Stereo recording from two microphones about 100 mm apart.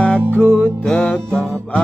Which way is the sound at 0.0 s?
15° left (ahead or behind).